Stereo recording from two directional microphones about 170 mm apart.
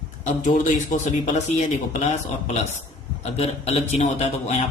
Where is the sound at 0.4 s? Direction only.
45° left (ahead or behind).